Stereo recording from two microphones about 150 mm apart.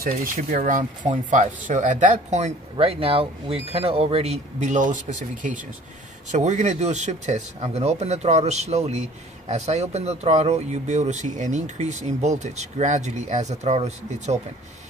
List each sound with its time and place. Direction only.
0.0 s speech: 65° right (ahead or behind); by 14.4 s 50° right (ahead or behind)